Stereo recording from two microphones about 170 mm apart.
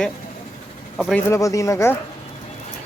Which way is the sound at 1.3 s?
20° left (ahead or behind).